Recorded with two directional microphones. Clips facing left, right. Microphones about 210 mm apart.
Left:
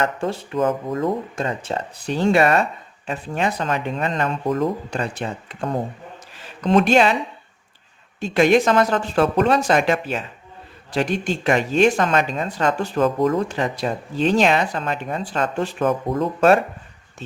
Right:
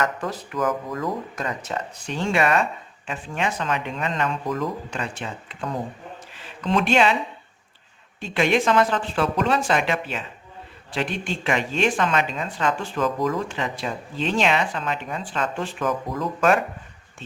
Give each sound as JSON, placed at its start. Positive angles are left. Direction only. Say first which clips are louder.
{"t": 0.0, "sound": "speech", "louder": "left 3 dB", "side_deg": 30}
{"t": 6.3, "sound": "a sound", "louder": "left 6 dB", "side_deg": 40}
{"t": 8.2, "sound": "speech", "louder": "left 5 dB", "side_deg": 40}
{"t": 16.0, "sound": "speech", "louder": "left 5 dB", "side_deg": 30}